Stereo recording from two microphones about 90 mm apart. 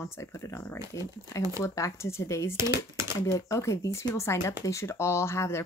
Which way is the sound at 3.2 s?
35° left (ahead or behind).